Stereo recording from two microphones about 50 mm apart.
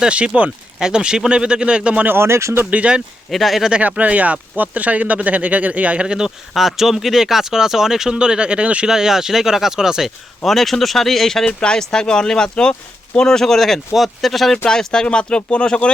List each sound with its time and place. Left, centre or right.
0.1 s speech: right
0.8 s speech: centre
2.1 s speech: right
2.6 s speech: right
3.2 s speech: centre
3.7 s speech: right
6.5 s speech: centre; by 8.9 s right
8.9 s speech: centre
10.4 s speech: centre
11.4 s speech: centre